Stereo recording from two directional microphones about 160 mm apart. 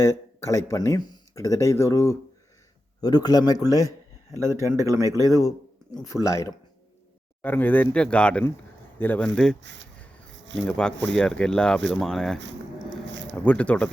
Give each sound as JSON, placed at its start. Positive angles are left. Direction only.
{"t": 0.0, "sound": "a man's voice", "side_deg": 20}
{"t": 4.4, "sound": "speech", "side_deg": -20}
{"t": 5.4, "sound": "a sound", "side_deg": 20}
{"t": 6.2, "sound": "a man's voice", "side_deg": 20}